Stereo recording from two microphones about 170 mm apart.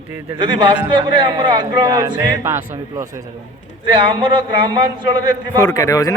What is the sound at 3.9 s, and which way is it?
Speech, 30° right (ahead or behind).